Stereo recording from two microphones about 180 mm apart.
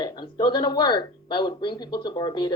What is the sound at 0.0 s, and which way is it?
A woman's voice, 25° left (ahead or behind).